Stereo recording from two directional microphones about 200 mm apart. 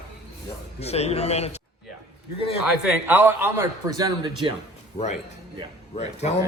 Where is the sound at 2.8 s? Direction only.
10° right (ahead or behind).